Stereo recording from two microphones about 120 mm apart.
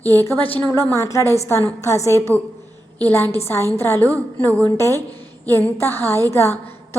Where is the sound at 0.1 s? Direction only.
20° left (ahead or behind).